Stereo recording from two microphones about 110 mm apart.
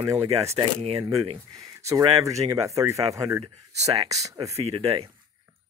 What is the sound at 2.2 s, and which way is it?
Speech, 30° right (ahead or behind).